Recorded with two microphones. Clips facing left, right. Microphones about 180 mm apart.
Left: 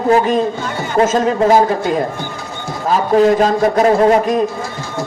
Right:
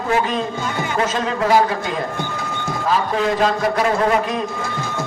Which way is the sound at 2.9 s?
40° left (ahead or behind).